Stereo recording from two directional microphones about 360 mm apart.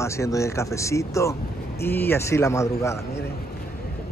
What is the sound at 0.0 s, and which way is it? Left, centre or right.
A man's voice, centre.